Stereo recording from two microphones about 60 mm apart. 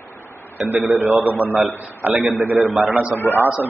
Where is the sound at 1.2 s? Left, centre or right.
Right.